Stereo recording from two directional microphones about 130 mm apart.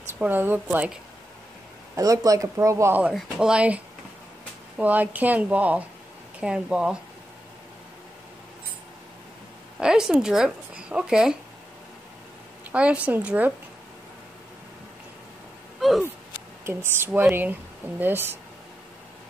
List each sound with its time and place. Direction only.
0.2 s speech: 15° right (ahead or behind)
2.0 s speech: 25° right (ahead or behind)
3.0 s speech: 5° right (ahead or behind)
9.8 s speech: 5° right (ahead or behind)
12.7 s speech: 10° right (ahead or behind)
16.6 s speech: 15° right (ahead or behind)